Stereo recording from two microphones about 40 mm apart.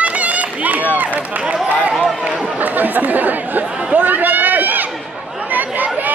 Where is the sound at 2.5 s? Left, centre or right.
Right.